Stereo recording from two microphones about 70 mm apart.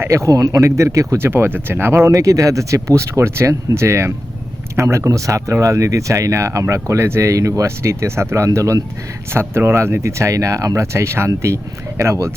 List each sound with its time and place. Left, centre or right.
0.0 s speech: right
1.2 s speech: right
8.4 s speech: right
9.3 s speech: right